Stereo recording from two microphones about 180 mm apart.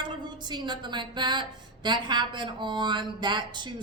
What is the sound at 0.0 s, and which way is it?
A woman's voice, 25° right (ahead or behind).